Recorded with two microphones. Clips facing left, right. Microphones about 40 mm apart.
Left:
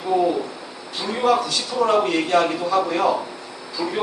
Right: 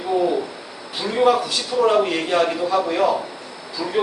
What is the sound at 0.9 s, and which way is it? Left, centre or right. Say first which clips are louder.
A man's voice: right 2 dB; centre.